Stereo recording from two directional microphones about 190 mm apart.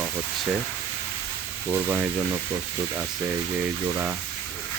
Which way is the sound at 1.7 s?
10° right (ahead or behind).